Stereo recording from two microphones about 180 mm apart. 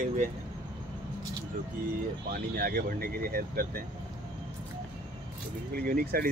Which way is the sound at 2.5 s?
55° right (ahead or behind).